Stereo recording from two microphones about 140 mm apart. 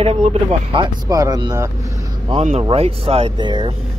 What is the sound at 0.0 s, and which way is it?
Speech, 45° right (ahead or behind).